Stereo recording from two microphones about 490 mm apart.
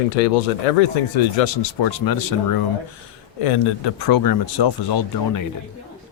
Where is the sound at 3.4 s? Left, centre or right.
Left.